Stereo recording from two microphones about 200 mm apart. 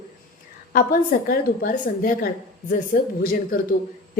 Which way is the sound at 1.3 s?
45° left (ahead or behind).